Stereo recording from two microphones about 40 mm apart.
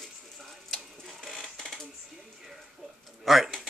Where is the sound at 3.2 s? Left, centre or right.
Centre.